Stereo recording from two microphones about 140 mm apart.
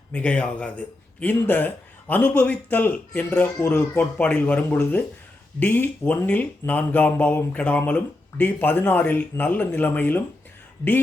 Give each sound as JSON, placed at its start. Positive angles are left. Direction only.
{"t": 0.1, "sound": "a man's voice", "side_deg": 10}